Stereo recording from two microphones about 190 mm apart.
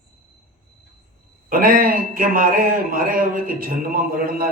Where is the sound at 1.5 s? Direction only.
50° right (ahead or behind).